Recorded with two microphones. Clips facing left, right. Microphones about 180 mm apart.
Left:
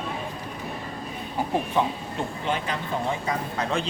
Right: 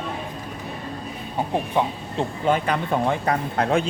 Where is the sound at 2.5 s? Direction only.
60° right (ahead or behind).